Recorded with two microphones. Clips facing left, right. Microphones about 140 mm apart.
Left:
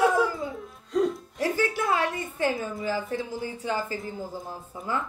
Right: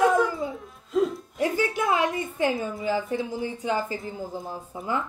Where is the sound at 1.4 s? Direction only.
20° right (ahead or behind).